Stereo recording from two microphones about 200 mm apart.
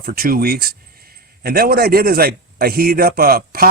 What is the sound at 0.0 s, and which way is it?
Speech, 45° right (ahead or behind).